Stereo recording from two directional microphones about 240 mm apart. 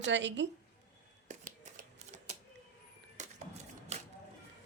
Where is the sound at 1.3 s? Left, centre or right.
Right.